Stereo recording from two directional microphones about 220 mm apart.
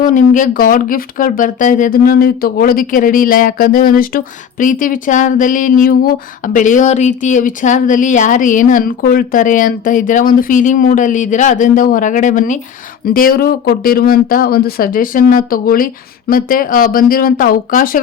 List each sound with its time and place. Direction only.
0.0 s speech: 35° left (ahead or behind)